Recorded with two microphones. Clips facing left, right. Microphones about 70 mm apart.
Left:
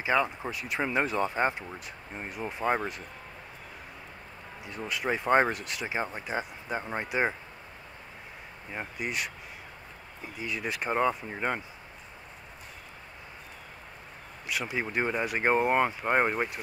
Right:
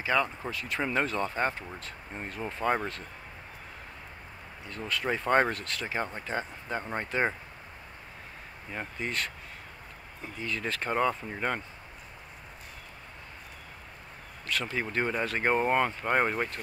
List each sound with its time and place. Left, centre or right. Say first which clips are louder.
0.0 s speech: left 1 dB; centre
4.6 s speech: even; centre
8.7 s speech: even; centre
10.3 s speech: even; centre
14.5 s speech: even; centre